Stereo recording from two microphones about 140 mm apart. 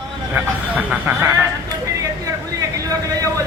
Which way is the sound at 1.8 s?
25° right (ahead or behind).